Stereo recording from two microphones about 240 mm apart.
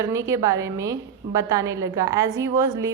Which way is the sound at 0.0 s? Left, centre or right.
Centre.